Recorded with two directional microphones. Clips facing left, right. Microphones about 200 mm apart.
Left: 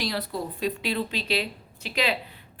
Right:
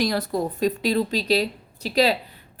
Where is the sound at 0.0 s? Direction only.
45° right (ahead or behind).